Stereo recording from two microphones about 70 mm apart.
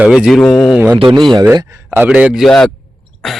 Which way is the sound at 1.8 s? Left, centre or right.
Right.